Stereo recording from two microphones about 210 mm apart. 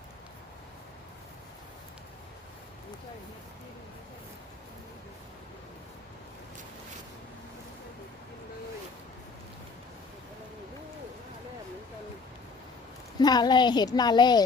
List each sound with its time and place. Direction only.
13.1 s a woman's voice: 20° left (ahead or behind)